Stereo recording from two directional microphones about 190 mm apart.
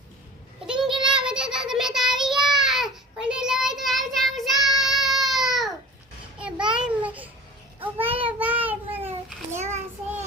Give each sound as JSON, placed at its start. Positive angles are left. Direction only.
{"t": 1.0, "sound": "child singing", "side_deg": -5}
{"t": 6.7, "sound": "a sound", "side_deg": -5}
{"t": 7.9, "sound": "child singing", "side_deg": -10}
{"t": 8.6, "sound": "babbling", "side_deg": -10}
{"t": 9.6, "sound": "child singing", "side_deg": -35}